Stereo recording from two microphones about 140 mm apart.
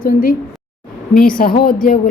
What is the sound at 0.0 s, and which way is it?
A woman's voice, 90° left.